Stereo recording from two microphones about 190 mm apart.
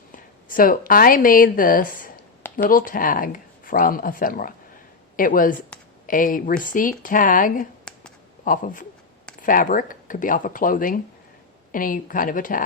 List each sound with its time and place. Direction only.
0.5 s speech: 45° left (ahead or behind)